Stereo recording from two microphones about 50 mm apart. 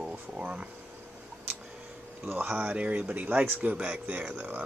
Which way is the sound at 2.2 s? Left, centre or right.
Right.